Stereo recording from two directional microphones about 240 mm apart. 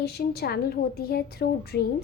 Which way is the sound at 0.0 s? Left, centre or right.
Left.